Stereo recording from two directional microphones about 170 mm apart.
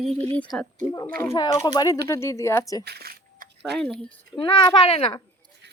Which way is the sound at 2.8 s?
70° right (ahead or behind).